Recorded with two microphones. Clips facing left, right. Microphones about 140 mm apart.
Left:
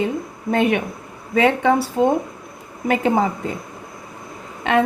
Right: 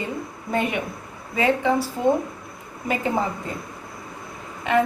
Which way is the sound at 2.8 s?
70° left (ahead or behind).